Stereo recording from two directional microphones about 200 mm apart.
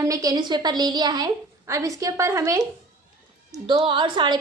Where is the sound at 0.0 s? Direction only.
15° right (ahead or behind).